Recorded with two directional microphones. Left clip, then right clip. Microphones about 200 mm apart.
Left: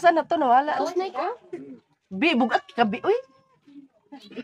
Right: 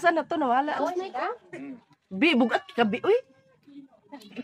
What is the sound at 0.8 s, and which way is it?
Speech, 15° left (ahead or behind).